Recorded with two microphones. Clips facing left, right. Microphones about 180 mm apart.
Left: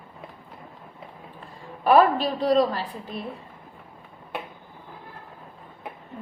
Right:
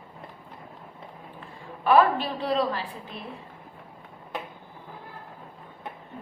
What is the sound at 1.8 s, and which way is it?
A woman's voice, 40° left (ahead or behind).